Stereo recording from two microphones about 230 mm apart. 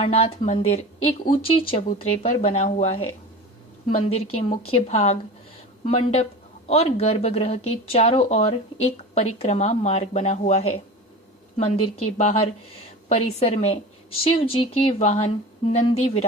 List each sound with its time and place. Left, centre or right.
0.0 s speech: left